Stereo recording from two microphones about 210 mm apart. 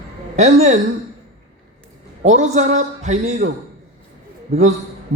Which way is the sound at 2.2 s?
35° right (ahead or behind).